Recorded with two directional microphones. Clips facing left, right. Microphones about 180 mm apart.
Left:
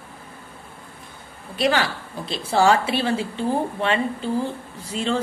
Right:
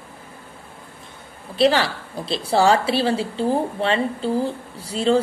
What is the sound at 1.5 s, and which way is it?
Speech, 30° right (ahead or behind).